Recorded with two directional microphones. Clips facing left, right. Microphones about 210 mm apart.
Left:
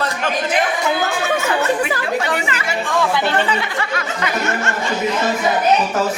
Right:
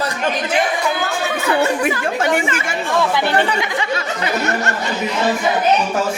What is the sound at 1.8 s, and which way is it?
Speech, 45° right (ahead or behind).